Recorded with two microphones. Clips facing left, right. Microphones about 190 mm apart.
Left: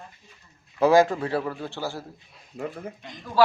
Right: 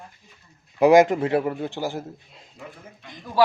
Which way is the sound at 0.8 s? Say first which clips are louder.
Right 3 dB; 20° right (ahead or behind).